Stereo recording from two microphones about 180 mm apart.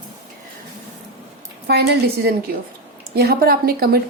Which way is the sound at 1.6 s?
65° right (ahead or behind).